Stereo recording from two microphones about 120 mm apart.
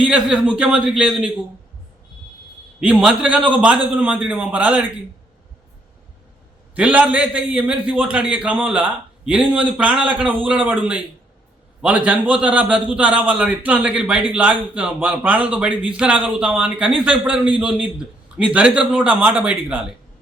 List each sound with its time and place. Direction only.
0.0 s a man's voice: 10° right (ahead or behind)
2.8 s a man's voice: 10° right (ahead or behind)
6.7 s a man's voice: 15° right (ahead or behind)